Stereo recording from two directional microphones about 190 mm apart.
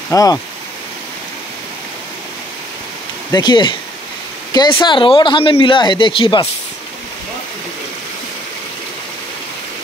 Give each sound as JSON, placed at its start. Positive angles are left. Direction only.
{"t": 0.1, "sound": "speech", "side_deg": 20}
{"t": 3.3, "sound": "speech", "side_deg": 25}